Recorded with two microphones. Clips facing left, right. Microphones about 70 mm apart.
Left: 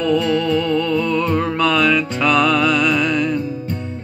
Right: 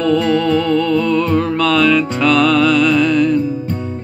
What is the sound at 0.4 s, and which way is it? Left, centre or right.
Music, right.